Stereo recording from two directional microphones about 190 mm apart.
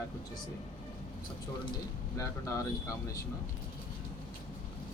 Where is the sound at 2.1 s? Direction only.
15° left (ahead or behind).